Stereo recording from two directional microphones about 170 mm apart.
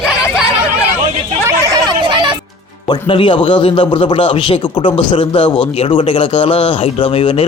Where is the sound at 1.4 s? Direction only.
20° right (ahead or behind).